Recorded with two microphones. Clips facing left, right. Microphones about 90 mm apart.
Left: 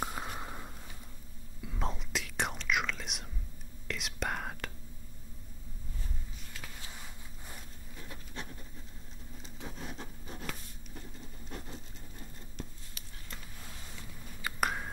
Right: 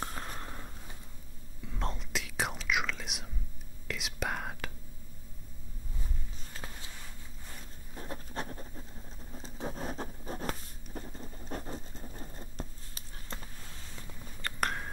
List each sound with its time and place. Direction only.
0.0 s a sound: 10° left (ahead or behind)
1.6 s whispering: centre (ahead or behind)
7.9 s a sound: 40° right (ahead or behind)
9.3 s scratch: 40° right (ahead or behind)
11.0 s patter: 40° right (ahead or behind)
14.4 s whispering: 5° left (ahead or behind)